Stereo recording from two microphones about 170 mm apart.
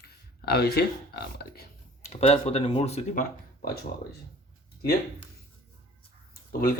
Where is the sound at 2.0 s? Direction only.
40° left (ahead or behind); by 3.7 s 55° left (ahead or behind).